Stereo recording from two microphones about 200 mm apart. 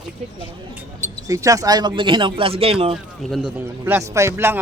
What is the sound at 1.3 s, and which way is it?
Speech, 15° right (ahead or behind).